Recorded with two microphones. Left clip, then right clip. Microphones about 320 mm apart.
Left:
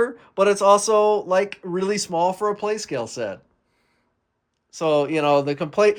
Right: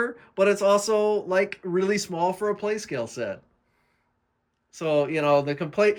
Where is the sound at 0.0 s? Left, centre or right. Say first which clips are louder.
Left 3 dB; centre.